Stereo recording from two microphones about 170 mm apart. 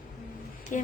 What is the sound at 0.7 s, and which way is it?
Speech, 50° left (ahead or behind).